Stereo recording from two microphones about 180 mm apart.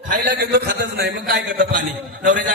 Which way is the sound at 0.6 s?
60° right (ahead or behind).